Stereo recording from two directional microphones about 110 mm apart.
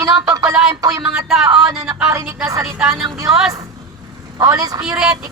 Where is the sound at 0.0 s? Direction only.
30° right (ahead or behind).